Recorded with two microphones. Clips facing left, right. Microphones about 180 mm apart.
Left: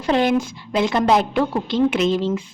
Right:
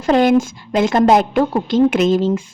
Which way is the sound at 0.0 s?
45° right (ahead or behind).